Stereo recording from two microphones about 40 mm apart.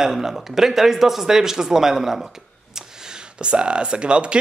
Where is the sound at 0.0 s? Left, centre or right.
Centre.